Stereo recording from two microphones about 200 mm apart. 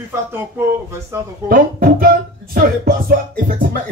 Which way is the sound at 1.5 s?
45° right (ahead or behind).